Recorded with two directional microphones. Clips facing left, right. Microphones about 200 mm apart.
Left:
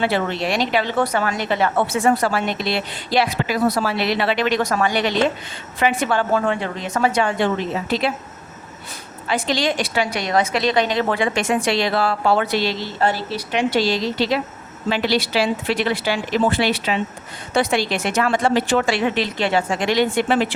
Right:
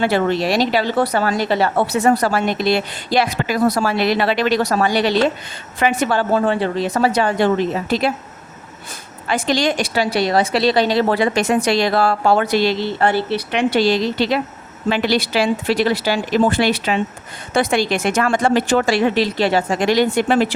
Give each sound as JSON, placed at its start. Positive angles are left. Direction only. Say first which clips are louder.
{"t": 0.0, "sound": "speech", "louder": "right 4 dB", "side_deg": -40}
{"t": 9.2, "sound": "a woman's voice", "louder": "right 3 dB", "side_deg": -45}